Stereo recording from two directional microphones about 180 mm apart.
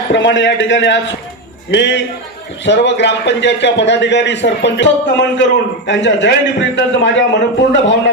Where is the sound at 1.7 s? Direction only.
75° left (ahead or behind).